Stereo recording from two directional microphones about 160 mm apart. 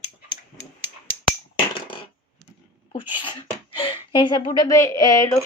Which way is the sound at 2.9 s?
30° left (ahead or behind).